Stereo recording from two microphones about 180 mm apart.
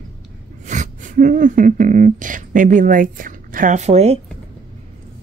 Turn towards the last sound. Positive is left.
turn(degrees=-35)  # may be behind; listen again after turning